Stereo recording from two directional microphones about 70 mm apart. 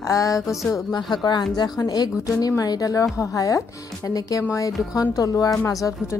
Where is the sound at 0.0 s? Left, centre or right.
Left.